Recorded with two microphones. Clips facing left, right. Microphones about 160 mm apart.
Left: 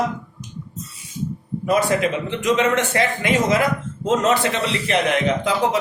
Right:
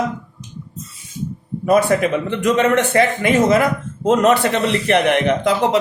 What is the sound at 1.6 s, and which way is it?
Speech, 55° right (ahead or behind).